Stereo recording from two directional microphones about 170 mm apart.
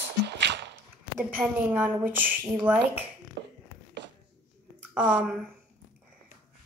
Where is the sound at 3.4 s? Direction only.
35° right (ahead or behind).